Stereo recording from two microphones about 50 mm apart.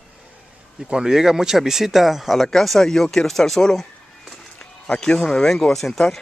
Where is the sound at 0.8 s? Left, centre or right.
Centre.